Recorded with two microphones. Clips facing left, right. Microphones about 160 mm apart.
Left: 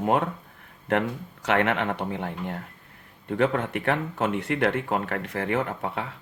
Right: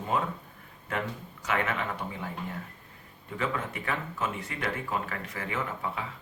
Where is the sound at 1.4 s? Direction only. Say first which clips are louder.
Left 7 dB; 70° left (ahead or behind).